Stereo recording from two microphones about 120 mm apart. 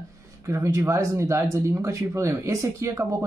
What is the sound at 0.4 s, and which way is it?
Speech, 25° right (ahead or behind).